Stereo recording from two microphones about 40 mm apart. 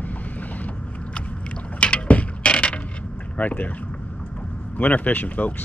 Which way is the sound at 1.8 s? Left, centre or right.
Left.